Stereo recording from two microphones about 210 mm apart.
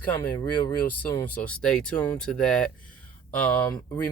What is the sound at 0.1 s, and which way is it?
Speech, 10° left (ahead or behind).